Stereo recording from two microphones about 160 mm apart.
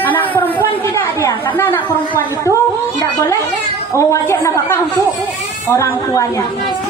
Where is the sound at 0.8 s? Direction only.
15° left (ahead or behind).